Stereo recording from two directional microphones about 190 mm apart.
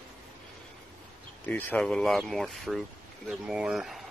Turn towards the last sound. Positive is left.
turn(degrees=0)  # may be behind; listen again after turning